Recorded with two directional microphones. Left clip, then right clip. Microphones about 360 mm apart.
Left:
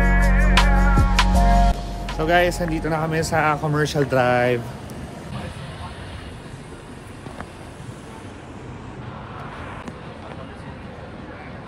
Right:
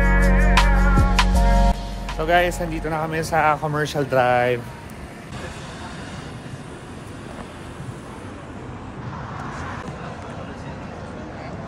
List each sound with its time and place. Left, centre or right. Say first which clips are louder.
0.0 s music: right 1 dB; centre
2.0 s speech: even; centre